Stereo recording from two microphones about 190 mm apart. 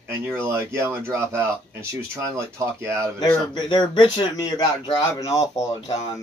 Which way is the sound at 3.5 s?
25° left (ahead or behind).